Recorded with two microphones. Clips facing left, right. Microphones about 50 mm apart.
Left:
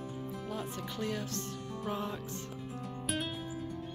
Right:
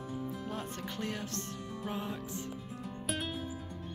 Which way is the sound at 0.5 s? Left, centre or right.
Right.